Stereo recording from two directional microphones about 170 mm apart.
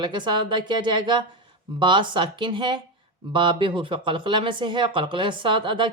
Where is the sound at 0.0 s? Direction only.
25° right (ahead or behind).